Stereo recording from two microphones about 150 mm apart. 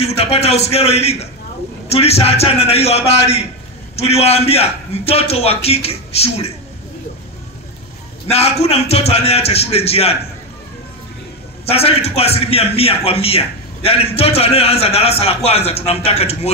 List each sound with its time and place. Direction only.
0.0 s a man's voice: 40° left (ahead or behind)
8.3 s a man's voice: 45° left (ahead or behind)
11.7 s a man's voice: 40° left (ahead or behind)